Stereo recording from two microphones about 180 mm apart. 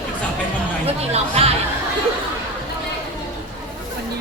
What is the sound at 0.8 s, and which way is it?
Speech, 35° right (ahead or behind).